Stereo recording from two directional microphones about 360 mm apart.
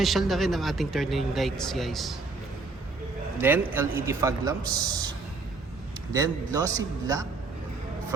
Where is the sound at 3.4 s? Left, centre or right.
Centre.